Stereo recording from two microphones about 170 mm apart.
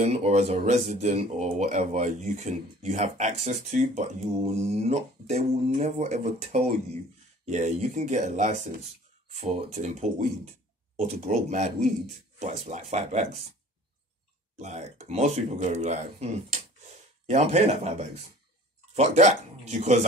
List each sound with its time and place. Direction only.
0.0 s speech: 40° right (ahead or behind)
14.6 s speech: 40° right (ahead or behind)